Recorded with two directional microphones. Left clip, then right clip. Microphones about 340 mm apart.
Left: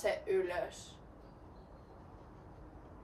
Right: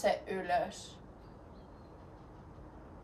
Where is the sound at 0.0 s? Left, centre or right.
Right.